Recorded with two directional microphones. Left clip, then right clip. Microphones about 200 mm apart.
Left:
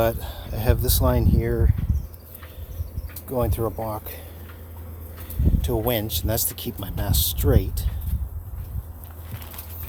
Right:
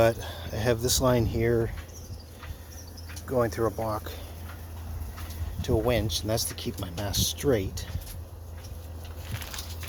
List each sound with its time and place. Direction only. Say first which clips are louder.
0.0 s speech: even; 5° left (ahead or behind)
3.2 s speech: left 1 dB; 10° left (ahead or behind)
5.6 s speech: left 1 dB; 20° left (ahead or behind)